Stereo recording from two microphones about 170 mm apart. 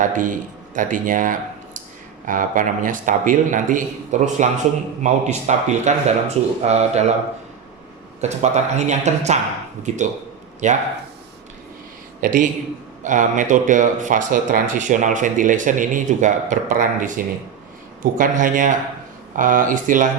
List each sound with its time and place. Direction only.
0.0 s speech: 50° right (ahead or behind)
8.2 s speech: 40° right (ahead or behind)
12.2 s speech: 50° right (ahead or behind)